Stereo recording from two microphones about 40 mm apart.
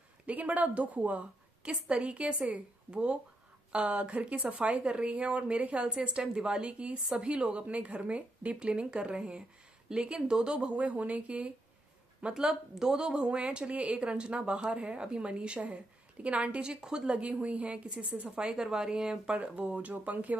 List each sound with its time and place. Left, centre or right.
0.3 s a woman's voice: right
1.6 s a woman's voice: right
10.8 s a woman's voice: right
12.4 s speech: centre; by 16.7 s right
16.7 s speech: centre
17.1 s a woman's voice: right
19.3 s a woman's voice: right